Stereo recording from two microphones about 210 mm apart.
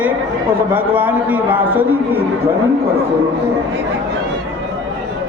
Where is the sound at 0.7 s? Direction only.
10° right (ahead or behind).